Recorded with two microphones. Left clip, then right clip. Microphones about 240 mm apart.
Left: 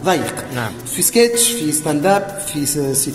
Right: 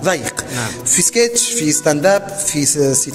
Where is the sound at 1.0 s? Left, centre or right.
Right.